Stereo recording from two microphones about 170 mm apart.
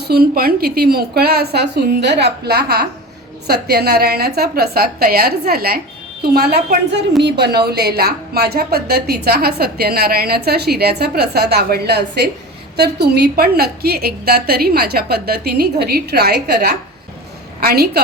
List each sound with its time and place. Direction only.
0.0 s a woman's voice: 65° right (ahead or behind)